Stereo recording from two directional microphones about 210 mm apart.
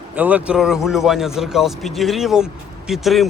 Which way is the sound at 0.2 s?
5° right (ahead or behind).